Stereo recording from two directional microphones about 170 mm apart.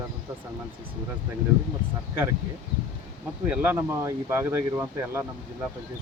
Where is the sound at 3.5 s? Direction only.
10° right (ahead or behind).